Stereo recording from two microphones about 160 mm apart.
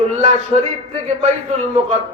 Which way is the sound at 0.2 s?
45° right (ahead or behind).